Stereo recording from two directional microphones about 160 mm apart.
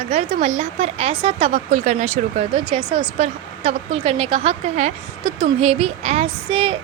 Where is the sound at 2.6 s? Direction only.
30° right (ahead or behind).